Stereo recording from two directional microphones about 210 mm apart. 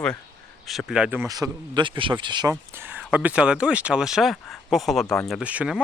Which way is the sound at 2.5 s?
10° right (ahead or behind).